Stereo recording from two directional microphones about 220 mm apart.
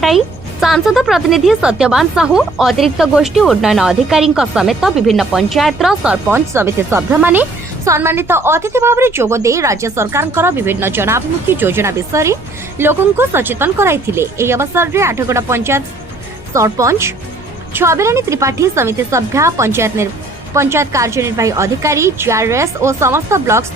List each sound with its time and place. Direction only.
0.6 s a woman's voice: centre (ahead or behind)